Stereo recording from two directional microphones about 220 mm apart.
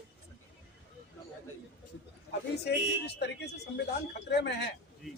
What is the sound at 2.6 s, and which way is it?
Speech, 50° left (ahead or behind).